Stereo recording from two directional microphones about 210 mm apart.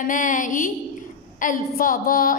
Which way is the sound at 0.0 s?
40° left (ahead or behind).